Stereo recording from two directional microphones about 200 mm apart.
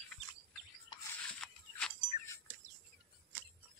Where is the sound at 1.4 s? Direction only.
5° left (ahead or behind).